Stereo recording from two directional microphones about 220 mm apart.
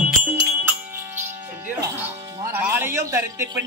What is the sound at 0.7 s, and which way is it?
Music, 10° right (ahead or behind).